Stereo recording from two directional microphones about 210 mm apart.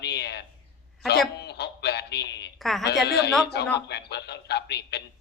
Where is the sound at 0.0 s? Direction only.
50° left (ahead or behind).